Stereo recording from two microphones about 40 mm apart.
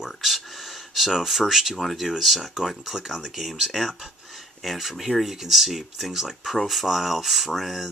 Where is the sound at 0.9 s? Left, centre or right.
Centre.